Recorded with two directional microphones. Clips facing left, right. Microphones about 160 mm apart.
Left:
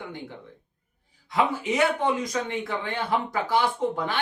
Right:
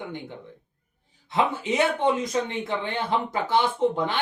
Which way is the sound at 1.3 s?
25° right (ahead or behind).